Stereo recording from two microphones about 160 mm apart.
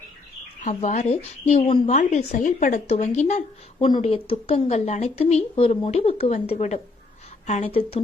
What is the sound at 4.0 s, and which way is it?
A woman's voice, 35° left (ahead or behind).